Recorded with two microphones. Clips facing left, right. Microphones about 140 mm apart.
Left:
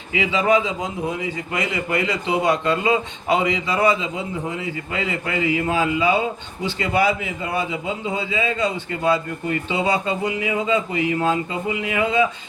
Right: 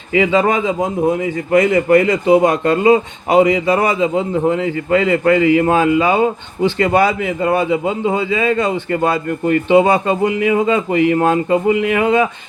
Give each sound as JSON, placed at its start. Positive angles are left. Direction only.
{"t": 0.1, "sound": "a man's voice", "side_deg": -50}